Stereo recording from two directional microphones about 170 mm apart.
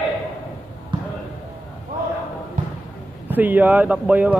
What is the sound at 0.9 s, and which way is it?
Basketball bounce, 30° right (ahead or behind).